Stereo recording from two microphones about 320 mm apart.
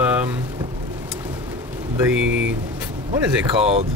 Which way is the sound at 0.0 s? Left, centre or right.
Centre.